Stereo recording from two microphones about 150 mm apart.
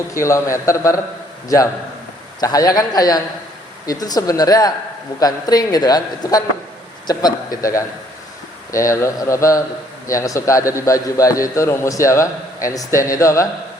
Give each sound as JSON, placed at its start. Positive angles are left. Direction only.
{"t": 0.1, "sound": "a man's voice", "side_deg": 20}
{"t": 2.4, "sound": "a man's voice", "side_deg": 25}